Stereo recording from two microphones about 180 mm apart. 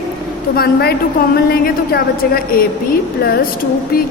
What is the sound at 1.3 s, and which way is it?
A woman's voice, 60° left (ahead or behind).